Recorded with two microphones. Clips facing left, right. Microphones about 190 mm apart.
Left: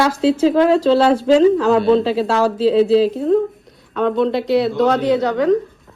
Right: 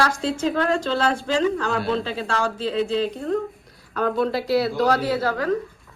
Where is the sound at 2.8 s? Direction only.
35° left (ahead or behind).